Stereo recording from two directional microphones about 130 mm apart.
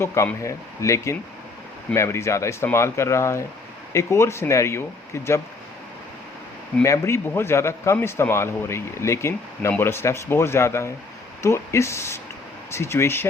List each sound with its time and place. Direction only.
0.0 s speech: 20° left (ahead or behind)
6.8 s speech: 20° left (ahead or behind)